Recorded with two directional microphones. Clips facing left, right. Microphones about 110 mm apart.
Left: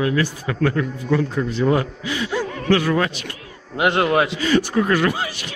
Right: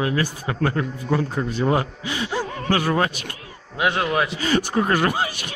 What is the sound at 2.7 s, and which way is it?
Speech, 40° right (ahead or behind).